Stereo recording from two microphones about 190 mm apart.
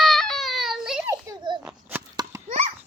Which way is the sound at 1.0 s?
20° right (ahead or behind).